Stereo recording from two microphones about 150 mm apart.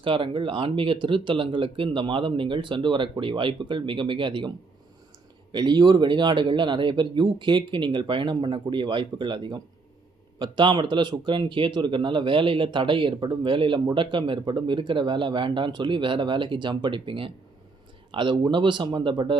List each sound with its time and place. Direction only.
0.0 s speech: 35° right (ahead or behind)